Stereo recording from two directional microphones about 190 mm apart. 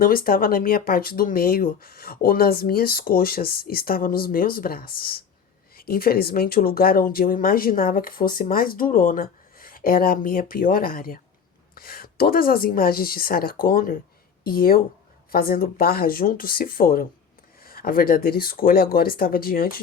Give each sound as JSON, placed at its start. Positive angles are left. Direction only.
{"t": 0.0, "sound": "speech", "side_deg": 50}